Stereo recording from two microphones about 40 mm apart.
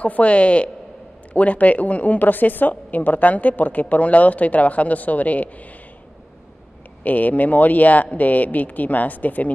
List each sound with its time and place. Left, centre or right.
0.0 s a woman's voice: left
7.0 s speech: left